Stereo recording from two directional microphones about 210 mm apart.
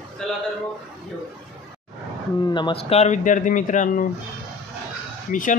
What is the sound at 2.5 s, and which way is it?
Speech, 25° left (ahead or behind).